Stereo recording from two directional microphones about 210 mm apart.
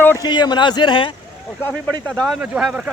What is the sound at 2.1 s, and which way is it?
Speech, centre (ahead or behind).